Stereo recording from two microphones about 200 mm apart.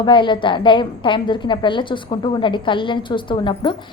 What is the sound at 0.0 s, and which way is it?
A woman's voice, 25° left (ahead or behind).